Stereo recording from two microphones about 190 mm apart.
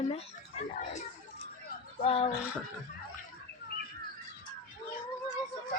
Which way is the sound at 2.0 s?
30° left (ahead or behind).